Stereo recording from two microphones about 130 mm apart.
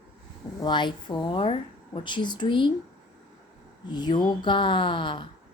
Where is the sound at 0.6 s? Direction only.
35° left (ahead or behind).